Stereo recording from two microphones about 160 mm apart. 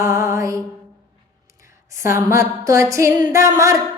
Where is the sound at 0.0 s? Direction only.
20° right (ahead or behind).